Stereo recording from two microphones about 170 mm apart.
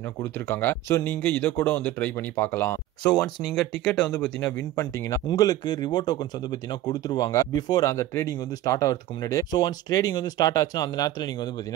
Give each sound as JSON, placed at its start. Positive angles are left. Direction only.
{"t": 0.2, "sound": "speech", "side_deg": 10}